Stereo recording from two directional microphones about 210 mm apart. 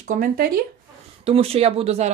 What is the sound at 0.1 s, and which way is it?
Speech, 40° right (ahead or behind).